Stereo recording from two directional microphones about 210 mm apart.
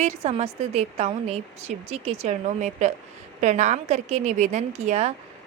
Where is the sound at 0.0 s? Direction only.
30° right (ahead or behind).